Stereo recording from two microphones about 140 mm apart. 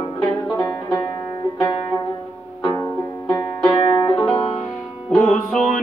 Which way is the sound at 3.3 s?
30° left (ahead or behind).